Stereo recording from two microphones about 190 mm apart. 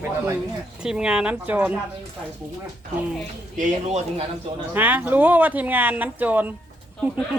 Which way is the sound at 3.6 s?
35° right (ahead or behind).